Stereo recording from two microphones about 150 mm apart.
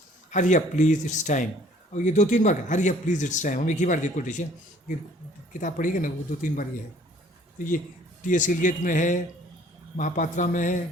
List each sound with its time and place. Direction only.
0.3 s a man's voice: 55° left (ahead or behind)
5.5 s a man's voice: 60° left (ahead or behind)
8.2 s a man's voice: 60° left (ahead or behind)